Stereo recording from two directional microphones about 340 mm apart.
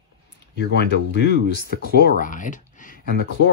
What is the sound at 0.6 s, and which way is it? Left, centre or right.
Speech, left.